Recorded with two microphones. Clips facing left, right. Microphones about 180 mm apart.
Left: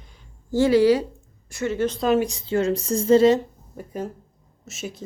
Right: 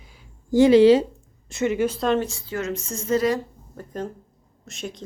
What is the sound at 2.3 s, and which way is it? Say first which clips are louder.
Speech: left 6 dB; 20° left (ahead or behind).